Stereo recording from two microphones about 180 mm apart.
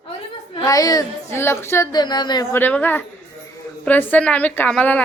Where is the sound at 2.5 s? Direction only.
10° left (ahead or behind).